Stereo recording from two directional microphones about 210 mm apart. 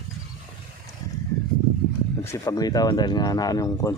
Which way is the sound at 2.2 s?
15° left (ahead or behind).